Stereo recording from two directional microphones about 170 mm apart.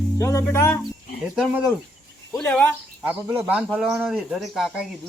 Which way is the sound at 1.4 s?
Centre (ahead or behind).